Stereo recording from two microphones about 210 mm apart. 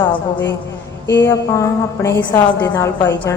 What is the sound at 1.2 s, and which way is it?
A woman's voice, 15° left (ahead or behind).